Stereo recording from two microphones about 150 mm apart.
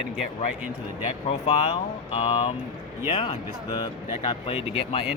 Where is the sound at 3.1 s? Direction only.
40° left (ahead or behind).